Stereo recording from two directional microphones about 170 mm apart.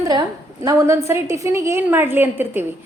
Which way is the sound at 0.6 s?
20° right (ahead or behind).